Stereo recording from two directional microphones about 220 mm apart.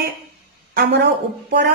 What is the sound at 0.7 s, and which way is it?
Speech, 50° right (ahead or behind).